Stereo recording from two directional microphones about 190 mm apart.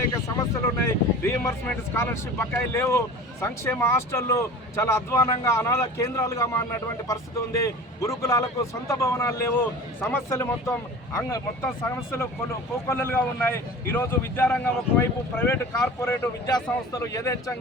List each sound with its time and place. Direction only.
0.3 s speech: 15° left (ahead or behind)
11.9 s speech: 15° left (ahead or behind)